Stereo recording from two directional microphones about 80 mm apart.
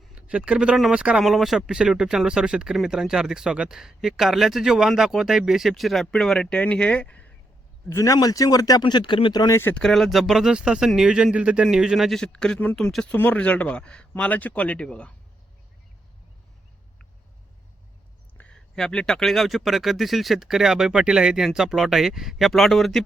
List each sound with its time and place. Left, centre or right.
0.2 s speech: centre
1.2 s speech: centre
7.9 s speech: left
8.8 s speech: left
9.5 s speech: left
9.7 s speech: centre
12.2 s speech: centre
18.3 s speech: centre